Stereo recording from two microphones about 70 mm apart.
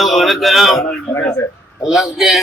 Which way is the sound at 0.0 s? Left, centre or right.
Centre.